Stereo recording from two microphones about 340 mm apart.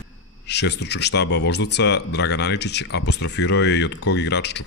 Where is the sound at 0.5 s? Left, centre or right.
Left.